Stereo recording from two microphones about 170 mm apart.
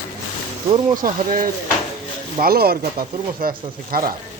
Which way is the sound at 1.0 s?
55° right (ahead or behind).